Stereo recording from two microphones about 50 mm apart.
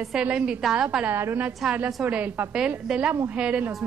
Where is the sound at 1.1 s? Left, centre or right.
Right.